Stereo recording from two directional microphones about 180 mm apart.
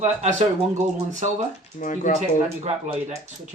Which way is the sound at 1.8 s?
45° left (ahead or behind).